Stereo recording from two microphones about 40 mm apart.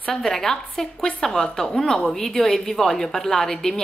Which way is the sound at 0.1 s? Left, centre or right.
Centre.